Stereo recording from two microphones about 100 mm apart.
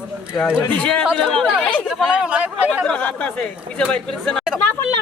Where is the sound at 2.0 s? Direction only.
10° right (ahead or behind).